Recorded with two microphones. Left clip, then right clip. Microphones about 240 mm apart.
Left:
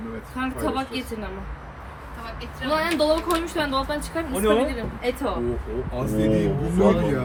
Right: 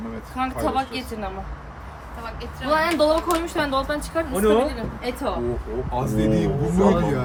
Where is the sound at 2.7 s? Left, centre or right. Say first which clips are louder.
Right 2 dB; centre.